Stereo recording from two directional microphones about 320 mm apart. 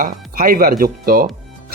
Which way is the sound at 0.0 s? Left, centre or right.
Right.